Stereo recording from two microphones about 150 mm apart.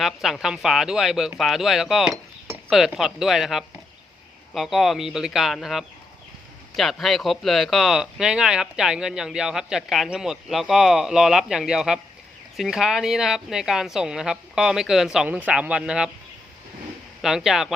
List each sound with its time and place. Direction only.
0.0 s speech: centre (ahead or behind)
17.2 s speech: centre (ahead or behind)